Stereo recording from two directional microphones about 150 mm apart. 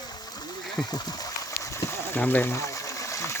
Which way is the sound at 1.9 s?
15° left (ahead or behind).